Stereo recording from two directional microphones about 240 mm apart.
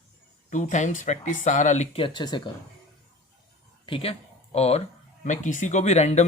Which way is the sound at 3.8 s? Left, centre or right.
Left.